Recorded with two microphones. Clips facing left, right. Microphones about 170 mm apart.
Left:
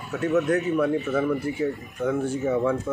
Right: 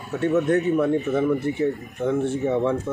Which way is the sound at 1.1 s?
25° right (ahead or behind).